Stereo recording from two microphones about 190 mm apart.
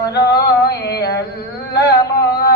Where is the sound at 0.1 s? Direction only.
60° left (ahead or behind).